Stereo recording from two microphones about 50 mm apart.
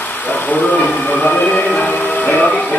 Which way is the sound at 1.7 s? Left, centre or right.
Left.